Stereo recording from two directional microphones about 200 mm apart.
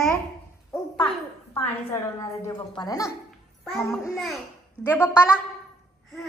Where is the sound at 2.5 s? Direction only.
20° left (ahead or behind).